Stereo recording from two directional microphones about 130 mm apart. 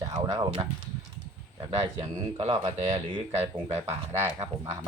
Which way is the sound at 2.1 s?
55° right (ahead or behind).